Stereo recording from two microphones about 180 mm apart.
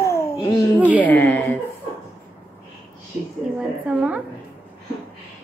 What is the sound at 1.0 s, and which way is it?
Speech, 10° left (ahead or behind).